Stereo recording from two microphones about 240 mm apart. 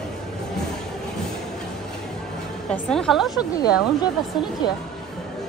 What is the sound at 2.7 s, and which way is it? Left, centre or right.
Speech, centre.